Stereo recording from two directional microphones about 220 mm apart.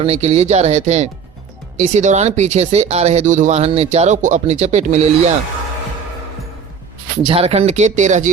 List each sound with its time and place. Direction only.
0.0 s speech: 30° right (ahead or behind)
7.2 s speech: 25° right (ahead or behind)